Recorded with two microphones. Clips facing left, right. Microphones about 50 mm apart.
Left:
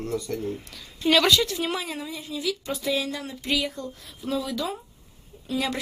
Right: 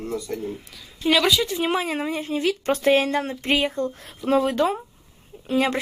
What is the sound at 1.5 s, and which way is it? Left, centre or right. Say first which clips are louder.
A woman's voice: right 5 dB; right.